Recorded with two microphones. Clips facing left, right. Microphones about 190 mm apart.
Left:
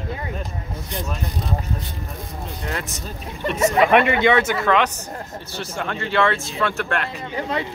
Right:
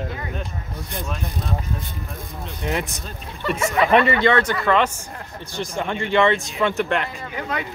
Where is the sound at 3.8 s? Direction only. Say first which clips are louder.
Right 2 dB; 10° left (ahead or behind).